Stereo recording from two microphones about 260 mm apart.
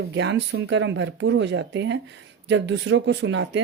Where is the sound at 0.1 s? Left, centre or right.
Right.